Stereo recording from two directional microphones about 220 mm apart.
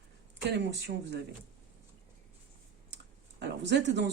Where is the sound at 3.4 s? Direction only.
50° right (ahead or behind).